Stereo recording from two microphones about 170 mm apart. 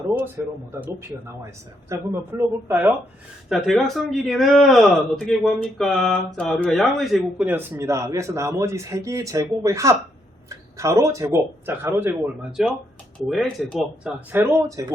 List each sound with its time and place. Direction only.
0.4 s speech: 15° right (ahead or behind)
3.5 s speech: centre (ahead or behind)
14.3 s speech: 15° right (ahead or behind)